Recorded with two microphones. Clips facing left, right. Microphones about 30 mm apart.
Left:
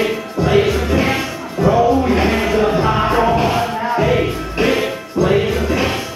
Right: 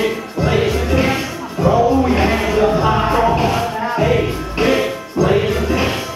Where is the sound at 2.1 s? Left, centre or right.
Centre.